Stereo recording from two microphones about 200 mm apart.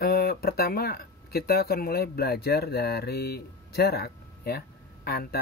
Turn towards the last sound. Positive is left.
turn(degrees=50)  # may be behind; listen again after turning